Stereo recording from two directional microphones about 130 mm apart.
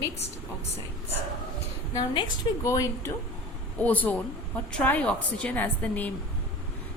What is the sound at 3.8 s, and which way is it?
A woman's voice, 10° left (ahead or behind).